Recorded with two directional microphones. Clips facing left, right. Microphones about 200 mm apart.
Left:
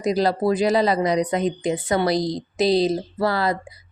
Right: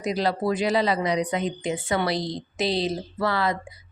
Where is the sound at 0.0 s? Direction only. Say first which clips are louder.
Left 4 dB; 40° left (ahead or behind).